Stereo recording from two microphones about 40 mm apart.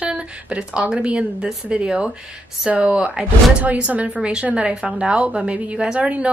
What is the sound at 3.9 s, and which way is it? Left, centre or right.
A woman's voice, right.